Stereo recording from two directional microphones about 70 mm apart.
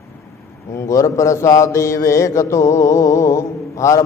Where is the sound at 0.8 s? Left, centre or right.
Left.